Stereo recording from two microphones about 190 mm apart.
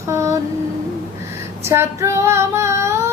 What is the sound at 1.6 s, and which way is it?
Female singing, 15° right (ahead or behind).